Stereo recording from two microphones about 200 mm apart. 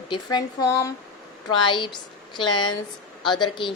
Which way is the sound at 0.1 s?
20° left (ahead or behind).